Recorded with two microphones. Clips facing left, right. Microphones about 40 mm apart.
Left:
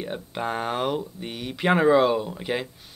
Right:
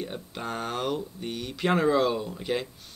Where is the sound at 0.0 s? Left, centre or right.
Left.